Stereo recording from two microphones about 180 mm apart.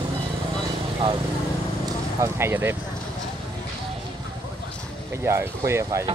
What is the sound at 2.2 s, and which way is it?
Speech, 15° right (ahead or behind).